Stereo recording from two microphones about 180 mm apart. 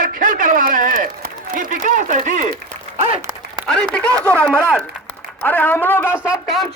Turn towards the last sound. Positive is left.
turn(degrees=0)  # may be behind; listen again after turning